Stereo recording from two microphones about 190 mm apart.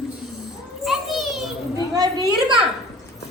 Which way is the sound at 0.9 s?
Centre (ahead or behind).